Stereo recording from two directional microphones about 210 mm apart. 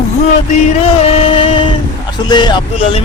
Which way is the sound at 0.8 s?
30° left (ahead or behind).